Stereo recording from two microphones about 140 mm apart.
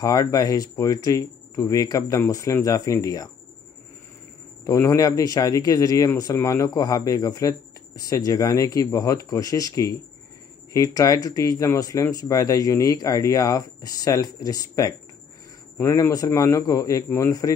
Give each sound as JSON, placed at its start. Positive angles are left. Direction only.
{"t": 0.0, "sound": "speech", "side_deg": 25}
{"t": 4.6, "sound": "speech", "side_deg": 20}